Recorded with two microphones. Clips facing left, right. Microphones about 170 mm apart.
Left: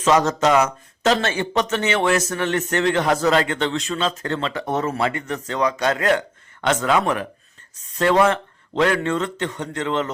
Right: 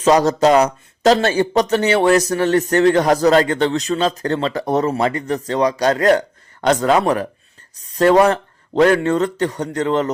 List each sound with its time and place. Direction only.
0.0 s speech: 35° right (ahead or behind)